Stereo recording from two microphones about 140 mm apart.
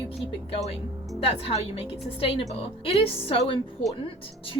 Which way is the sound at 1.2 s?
45° left (ahead or behind).